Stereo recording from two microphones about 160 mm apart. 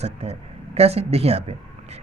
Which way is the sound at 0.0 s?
40° right (ahead or behind).